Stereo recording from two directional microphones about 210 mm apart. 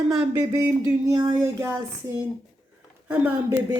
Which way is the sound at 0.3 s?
15° right (ahead or behind).